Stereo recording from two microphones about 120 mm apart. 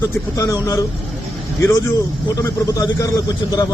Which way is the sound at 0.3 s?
30° left (ahead or behind).